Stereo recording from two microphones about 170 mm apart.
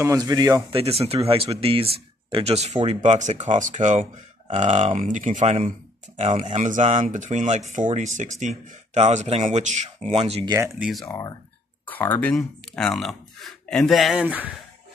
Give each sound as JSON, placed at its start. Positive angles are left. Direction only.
{"t": 0.0, "sound": "speech", "side_deg": -20}
{"t": 0.7, "sound": "speech", "side_deg": -35}
{"t": 10.8, "sound": "speech", "side_deg": 0}
{"t": 11.9, "sound": "speech", "side_deg": 10}